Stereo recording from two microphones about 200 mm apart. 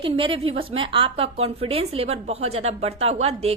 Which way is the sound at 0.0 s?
25° right (ahead or behind).